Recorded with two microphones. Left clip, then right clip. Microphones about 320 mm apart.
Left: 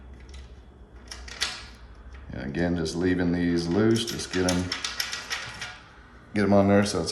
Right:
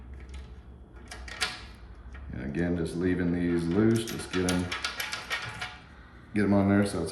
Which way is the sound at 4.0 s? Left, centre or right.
Left.